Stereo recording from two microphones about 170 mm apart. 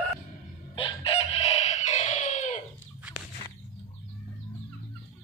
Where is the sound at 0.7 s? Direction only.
30° left (ahead or behind).